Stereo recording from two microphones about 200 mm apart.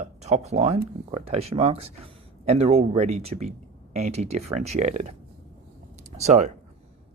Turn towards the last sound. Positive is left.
turn(degrees=-35)  # may be behind; listen again after turning